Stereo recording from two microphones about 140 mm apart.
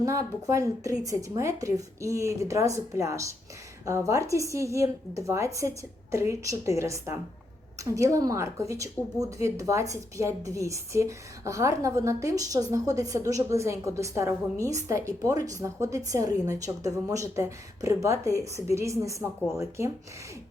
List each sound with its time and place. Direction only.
0.0 s a woman's voice: 25° right (ahead or behind)